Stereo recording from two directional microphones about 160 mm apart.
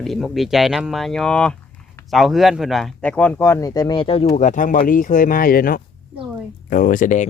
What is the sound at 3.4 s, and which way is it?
Speech, 20° left (ahead or behind).